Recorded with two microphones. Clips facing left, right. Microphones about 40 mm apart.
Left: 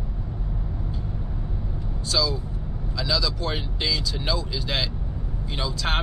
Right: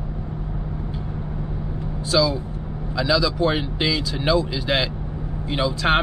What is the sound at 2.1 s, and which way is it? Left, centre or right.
Speech, centre.